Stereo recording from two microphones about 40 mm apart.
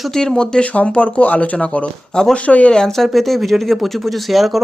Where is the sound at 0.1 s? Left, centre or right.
Centre.